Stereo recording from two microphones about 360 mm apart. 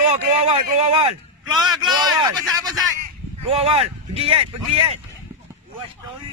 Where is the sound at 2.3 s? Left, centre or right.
Centre.